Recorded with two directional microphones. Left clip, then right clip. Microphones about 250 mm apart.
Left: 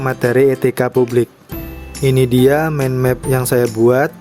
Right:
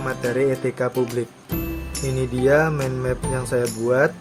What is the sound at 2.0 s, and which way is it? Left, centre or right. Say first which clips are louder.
Music: left 9 dB; left.